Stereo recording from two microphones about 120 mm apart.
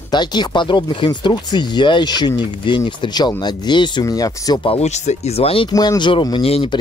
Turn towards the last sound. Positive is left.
turn(degrees=55)  # may be behind; listen again after turning